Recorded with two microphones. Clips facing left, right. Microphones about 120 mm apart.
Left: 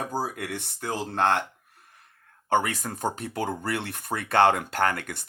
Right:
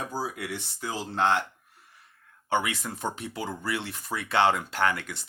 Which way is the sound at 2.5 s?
45° left (ahead or behind).